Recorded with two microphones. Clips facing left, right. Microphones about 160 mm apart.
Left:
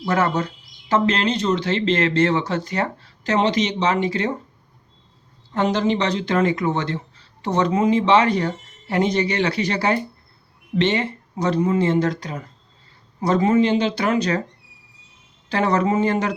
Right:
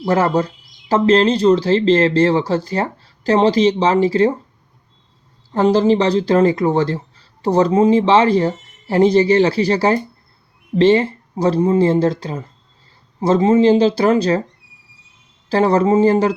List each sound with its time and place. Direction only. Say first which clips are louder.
0.1 s speech: right 5 dB; 30° right (ahead or behind)
5.5 s speech: right 6 dB; 35° right (ahead or behind)
15.4 s speech: right 6 dB; 35° right (ahead or behind)